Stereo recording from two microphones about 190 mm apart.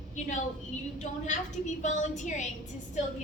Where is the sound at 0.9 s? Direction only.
40° left (ahead or behind).